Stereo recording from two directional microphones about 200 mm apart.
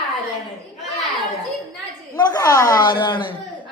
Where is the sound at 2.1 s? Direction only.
20° left (ahead or behind).